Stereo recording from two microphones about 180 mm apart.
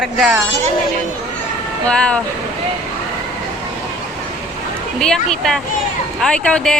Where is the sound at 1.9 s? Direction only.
5° left (ahead or behind).